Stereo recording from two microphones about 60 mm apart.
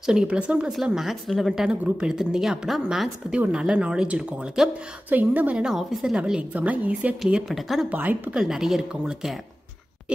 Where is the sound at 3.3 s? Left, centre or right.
Centre.